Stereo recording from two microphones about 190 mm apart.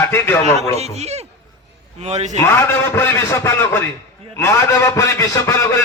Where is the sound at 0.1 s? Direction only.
15° left (ahead or behind).